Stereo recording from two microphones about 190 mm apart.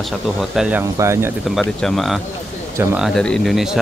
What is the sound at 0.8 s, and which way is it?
Speech, 15° right (ahead or behind).